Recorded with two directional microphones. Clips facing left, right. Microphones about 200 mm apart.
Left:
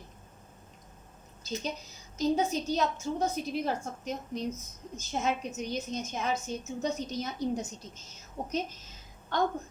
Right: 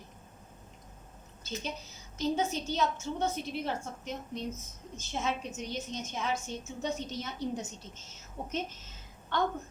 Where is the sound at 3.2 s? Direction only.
40° left (ahead or behind).